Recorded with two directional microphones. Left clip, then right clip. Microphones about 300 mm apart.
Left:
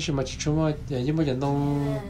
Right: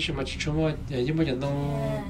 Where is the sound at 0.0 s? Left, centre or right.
Centre.